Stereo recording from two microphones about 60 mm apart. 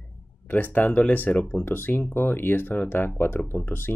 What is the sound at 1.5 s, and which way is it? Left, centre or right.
Speech, left.